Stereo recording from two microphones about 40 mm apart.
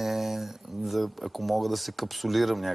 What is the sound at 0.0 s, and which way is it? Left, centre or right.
Speech, centre.